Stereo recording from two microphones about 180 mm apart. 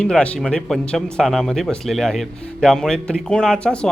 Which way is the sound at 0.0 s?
5° left (ahead or behind).